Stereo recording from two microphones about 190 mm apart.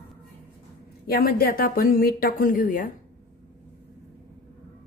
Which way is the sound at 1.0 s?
50° left (ahead or behind).